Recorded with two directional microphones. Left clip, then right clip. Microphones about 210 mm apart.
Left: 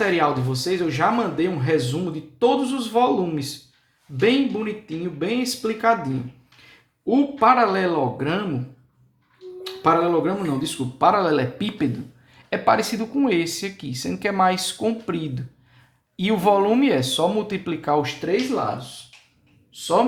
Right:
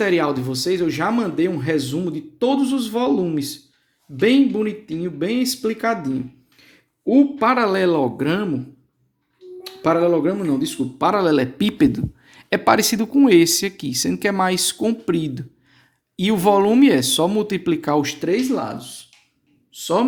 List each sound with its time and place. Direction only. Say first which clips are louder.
0.0 s speech: right 1 dB; 45° right (ahead or behind)
7.1 s speech: right 1 dB; 35° right (ahead or behind)
9.6 s speech: right 1 dB; 40° right (ahead or behind)